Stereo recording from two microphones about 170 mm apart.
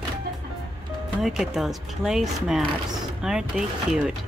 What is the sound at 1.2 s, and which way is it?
Speech, 5° right (ahead or behind).